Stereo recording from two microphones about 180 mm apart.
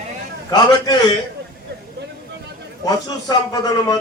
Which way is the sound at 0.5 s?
25° left (ahead or behind).